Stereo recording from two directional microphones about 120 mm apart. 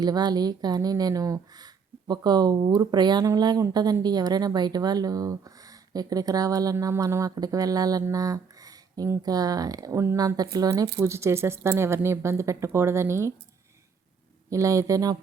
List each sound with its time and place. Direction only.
0.0 s speech: 35° right (ahead or behind)
14.5 s speech: 25° right (ahead or behind)